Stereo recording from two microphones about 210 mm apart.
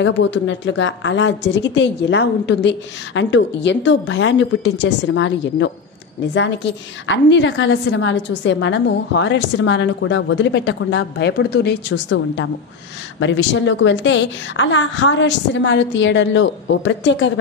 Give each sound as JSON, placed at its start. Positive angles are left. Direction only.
{"t": 0.0, "sound": "a woman's voice", "side_deg": 60}